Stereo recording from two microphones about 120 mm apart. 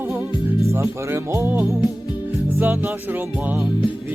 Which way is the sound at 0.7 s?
25° right (ahead or behind).